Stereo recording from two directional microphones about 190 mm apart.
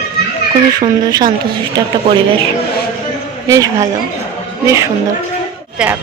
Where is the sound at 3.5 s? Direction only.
15° right (ahead or behind).